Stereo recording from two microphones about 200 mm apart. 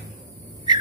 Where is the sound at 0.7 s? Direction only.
20° right (ahead or behind).